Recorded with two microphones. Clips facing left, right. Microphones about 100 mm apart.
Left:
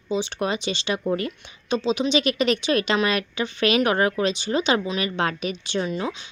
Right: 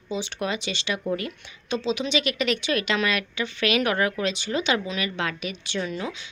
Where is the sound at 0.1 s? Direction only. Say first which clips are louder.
Left 4 dB; 30° left (ahead or behind).